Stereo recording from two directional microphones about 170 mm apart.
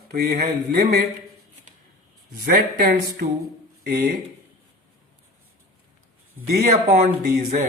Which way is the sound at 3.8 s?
65° right (ahead or behind).